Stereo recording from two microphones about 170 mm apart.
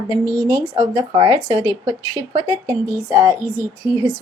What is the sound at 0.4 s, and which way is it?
Speech, 25° right (ahead or behind).